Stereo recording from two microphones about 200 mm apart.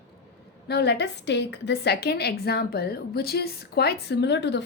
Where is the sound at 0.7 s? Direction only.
55° left (ahead or behind).